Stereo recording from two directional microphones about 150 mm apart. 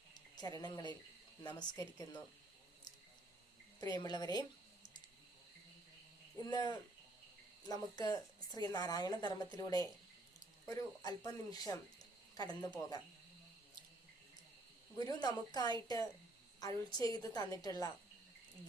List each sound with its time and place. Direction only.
0.1 s a sound: 25° left (ahead or behind)
1.5 s a woman's voice: 30° left (ahead or behind)
3.8 s a woman's voice: 25° left (ahead or behind)
6.3 s a woman's voice: 30° left (ahead or behind)
14.9 s a woman's voice: 25° left (ahead or behind)